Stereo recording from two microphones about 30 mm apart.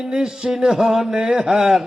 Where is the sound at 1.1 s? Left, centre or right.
Right.